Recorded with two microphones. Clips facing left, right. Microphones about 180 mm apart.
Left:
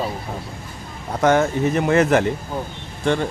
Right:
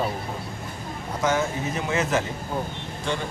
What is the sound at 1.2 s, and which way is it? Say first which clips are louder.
Speech: left 8 dB; 60° left (ahead or behind).